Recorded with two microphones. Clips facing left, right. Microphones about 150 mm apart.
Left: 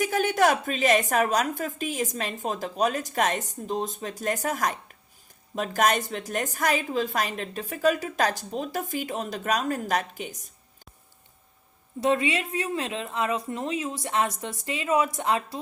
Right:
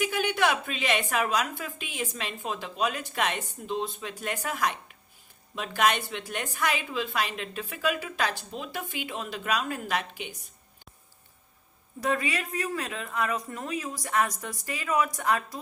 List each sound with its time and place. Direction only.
0.0 s a woman's voice: 40° left (ahead or behind)
11.9 s a woman's voice: 25° left (ahead or behind)